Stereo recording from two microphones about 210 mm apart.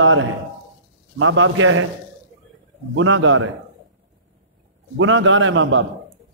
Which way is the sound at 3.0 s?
65° right (ahead or behind).